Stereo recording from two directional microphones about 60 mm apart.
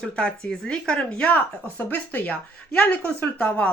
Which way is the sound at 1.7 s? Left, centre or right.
Left.